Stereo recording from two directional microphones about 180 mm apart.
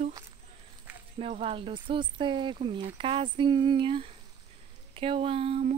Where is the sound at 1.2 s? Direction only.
30° right (ahead or behind).